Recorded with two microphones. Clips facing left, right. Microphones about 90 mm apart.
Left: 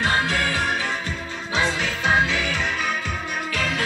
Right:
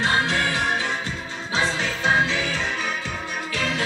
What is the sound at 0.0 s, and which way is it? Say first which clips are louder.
Music: even; 25° right (ahead or behind).